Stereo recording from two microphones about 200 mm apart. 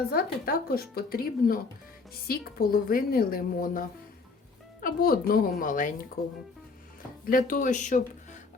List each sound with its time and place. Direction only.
0.1 s a woman's voice: 50° left (ahead or behind)
7.3 s speech: 45° left (ahead or behind)